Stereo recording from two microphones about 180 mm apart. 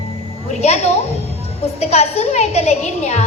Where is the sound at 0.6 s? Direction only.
35° left (ahead or behind).